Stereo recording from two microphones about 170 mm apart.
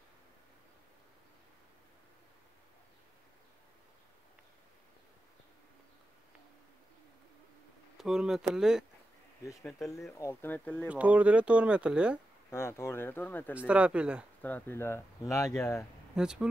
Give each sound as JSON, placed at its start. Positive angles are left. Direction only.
{"t": 8.0, "sound": "speech", "side_deg": -5}
{"t": 9.4, "sound": "speech", "side_deg": 20}
{"t": 9.7, "sound": "speech", "side_deg": 0}
{"t": 10.1, "sound": "speech", "side_deg": 15}
{"t": 10.9, "sound": "speech", "side_deg": -10}
{"t": 12.4, "sound": "speech", "side_deg": 15}
{"t": 13.6, "sound": "speech", "side_deg": -10}
{"t": 14.4, "sound": "speech", "side_deg": 10}
{"t": 16.2, "sound": "speech", "side_deg": -5}